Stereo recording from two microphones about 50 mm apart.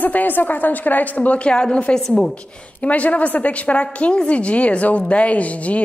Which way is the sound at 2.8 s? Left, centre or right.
Left.